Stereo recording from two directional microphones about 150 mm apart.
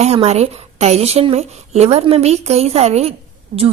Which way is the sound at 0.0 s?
45° right (ahead or behind).